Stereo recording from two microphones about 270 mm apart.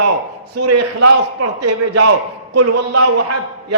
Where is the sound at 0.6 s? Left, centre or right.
Right.